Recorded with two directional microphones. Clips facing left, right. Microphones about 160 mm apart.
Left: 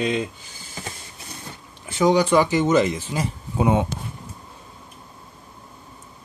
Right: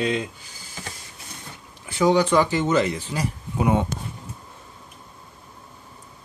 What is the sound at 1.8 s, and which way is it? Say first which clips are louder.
Speech: left 1 dB; 15° left (ahead or behind).